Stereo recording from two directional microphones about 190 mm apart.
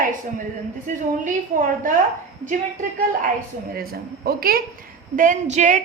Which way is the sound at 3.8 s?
50° right (ahead or behind).